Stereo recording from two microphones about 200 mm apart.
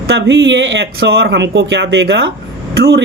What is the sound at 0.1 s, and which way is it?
A man's voice, 65° right (ahead or behind).